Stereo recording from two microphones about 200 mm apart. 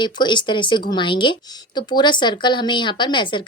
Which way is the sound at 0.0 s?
25° left (ahead or behind).